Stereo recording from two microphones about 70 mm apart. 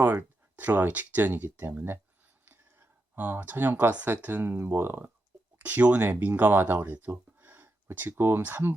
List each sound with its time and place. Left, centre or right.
0.0 s speech: right